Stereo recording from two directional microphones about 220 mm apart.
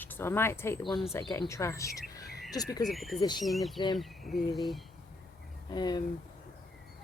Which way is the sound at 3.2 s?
20° left (ahead or behind).